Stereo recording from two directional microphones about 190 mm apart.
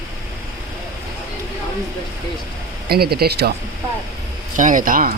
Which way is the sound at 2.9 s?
55° right (ahead or behind).